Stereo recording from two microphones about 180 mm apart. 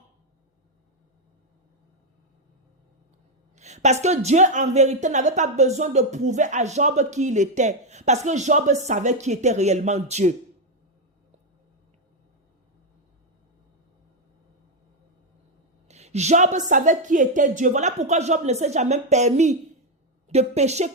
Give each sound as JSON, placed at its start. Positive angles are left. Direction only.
{"t": 3.5, "sound": "a woman's voice", "side_deg": -40}
{"t": 15.9, "sound": "a woman's voice", "side_deg": -40}